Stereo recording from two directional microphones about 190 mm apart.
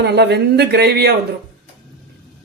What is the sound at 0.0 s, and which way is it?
Speech, 60° right (ahead or behind).